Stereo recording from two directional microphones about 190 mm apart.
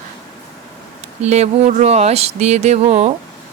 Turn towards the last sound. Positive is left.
turn(degrees=-35)  # may be behind; listen again after turning